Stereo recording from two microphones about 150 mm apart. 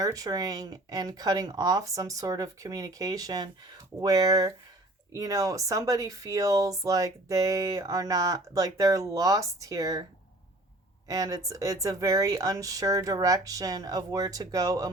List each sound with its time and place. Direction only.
0.0 s speech: 25° right (ahead or behind)
11.1 s speech: 25° right (ahead or behind)